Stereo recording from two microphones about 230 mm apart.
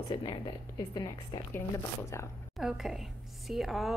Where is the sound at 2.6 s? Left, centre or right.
Centre.